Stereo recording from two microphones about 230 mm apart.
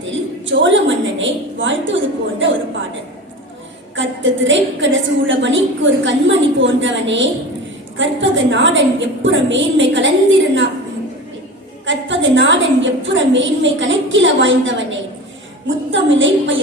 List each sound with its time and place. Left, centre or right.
0.5 s a woman's voice: right
3.9 s a woman's voice: right
11.9 s a woman's voice: right